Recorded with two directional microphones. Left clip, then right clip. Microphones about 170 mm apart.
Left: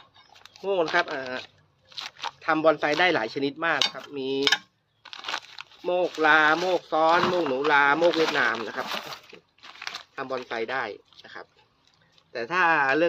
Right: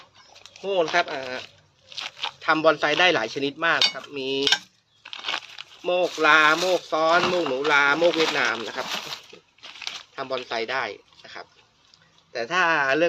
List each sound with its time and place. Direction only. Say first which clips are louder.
0.4 s a sound: right 1 dB; 20° left (ahead or behind)
0.9 s speech: right 2 dB; 35° left (ahead or behind)
2.0 s a sound: right 3 dB; 15° left (ahead or behind)
2.4 s cutlery: right 2 dB; 25° left (ahead or behind)
5.0 s a sound: right 3 dB; 10° left (ahead or behind)
5.8 s speech: right 2 dB; 20° left (ahead or behind)
8.0 s speech: right 1 dB; 5° left (ahead or behind)
8.4 s cutlery: right 1 dB; 20° left (ahead or behind)
9.6 s crumpling: right 3 dB; 5° left (ahead or behind)
10.2 s cutlery: right 1 dB; 20° left (ahead or behind)
10.5 s a sound: right 2 dB; 25° left (ahead or behind)
12.3 s speech: right 1 dB; 35° left (ahead or behind)